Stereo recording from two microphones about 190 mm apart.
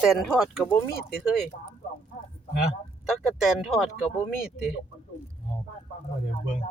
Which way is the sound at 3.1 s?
Centre (ahead or behind).